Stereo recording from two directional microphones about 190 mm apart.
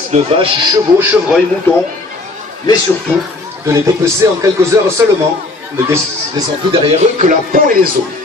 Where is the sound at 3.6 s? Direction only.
15° right (ahead or behind).